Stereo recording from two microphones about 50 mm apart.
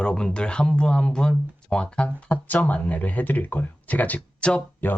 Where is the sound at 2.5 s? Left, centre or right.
Left.